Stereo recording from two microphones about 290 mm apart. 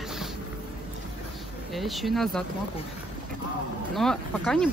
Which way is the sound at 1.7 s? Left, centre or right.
Centre.